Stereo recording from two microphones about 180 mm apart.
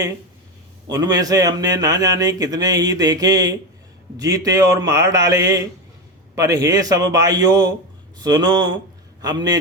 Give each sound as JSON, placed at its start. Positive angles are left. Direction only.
{"t": 0.9, "sound": "speech", "side_deg": -20}